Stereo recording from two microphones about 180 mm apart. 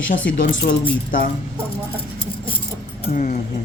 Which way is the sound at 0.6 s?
50° left (ahead or behind).